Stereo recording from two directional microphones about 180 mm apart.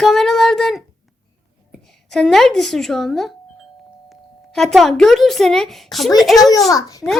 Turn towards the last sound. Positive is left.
turn(degrees=20)  # may be behind; listen again after turning